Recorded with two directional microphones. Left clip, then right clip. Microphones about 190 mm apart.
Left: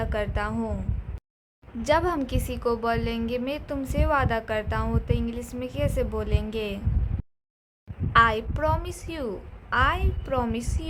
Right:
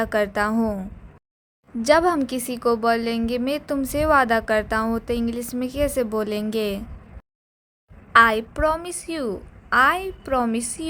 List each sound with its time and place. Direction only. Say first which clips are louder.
0.0 s a woman's voice: right 7 dB; 35° right (ahead or behind)
1.8 s a woman's voice: right 6 dB; 30° right (ahead or behind)
8.1 s a woman's voice: right 5 dB; 25° right (ahead or behind)